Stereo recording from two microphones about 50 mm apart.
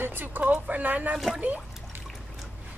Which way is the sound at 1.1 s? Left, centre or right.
Centre.